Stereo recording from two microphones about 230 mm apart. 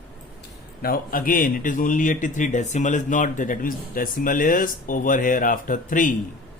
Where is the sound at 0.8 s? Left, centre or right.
Left.